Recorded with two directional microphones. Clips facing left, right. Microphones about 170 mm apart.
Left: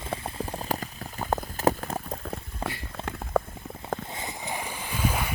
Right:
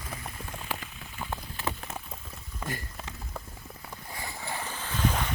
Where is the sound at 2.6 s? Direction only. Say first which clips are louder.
Left 2 dB; 35° left (ahead or behind).